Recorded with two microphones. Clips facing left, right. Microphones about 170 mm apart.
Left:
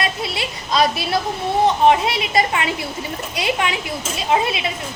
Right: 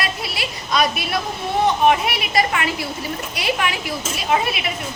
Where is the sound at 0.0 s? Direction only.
25° left (ahead or behind).